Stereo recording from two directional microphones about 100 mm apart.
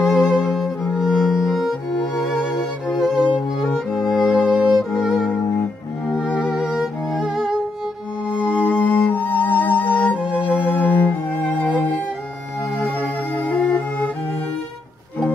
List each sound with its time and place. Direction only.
0.3 s music: centre (ahead or behind)
2.9 s music: 5° right (ahead or behind)
6.3 s music: 5° right (ahead or behind)
8.5 s music: 15° left (ahead or behind)
10.2 s music: 10° right (ahead or behind)
10.6 s music: 15° left (ahead or behind)
13.0 s music: 15° left (ahead or behind)